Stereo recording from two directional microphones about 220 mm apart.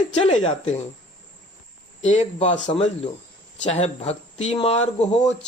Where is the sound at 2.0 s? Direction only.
30° left (ahead or behind).